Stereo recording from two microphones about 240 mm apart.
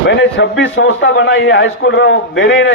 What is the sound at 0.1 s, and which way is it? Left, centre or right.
A man's voice, left.